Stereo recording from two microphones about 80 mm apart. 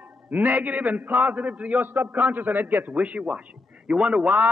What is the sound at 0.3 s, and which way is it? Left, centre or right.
A man's voice, right.